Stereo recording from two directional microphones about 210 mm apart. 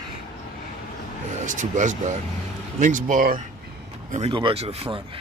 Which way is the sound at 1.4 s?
35° right (ahead or behind).